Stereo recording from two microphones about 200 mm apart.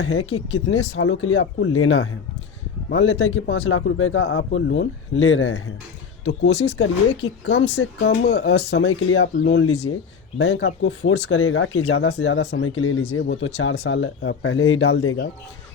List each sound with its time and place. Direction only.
0.0 s speech: 90° left
0.7 s speech: 70° left (ahead or behind)
3.5 s speech: 90° left
4.4 s speech: 70° left (ahead or behind); by 5.7 s 90° left
6.5 s speech: 35° left (ahead or behind)
7.2 s speech: 65° left (ahead or behind); by 9.7 s 85° left
10.3 s speech: 65° left (ahead or behind)